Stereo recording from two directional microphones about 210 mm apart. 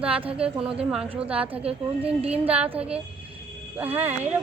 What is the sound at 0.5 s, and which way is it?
Speech, 25° right (ahead or behind).